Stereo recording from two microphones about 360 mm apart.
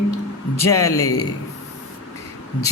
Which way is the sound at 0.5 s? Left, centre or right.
Centre.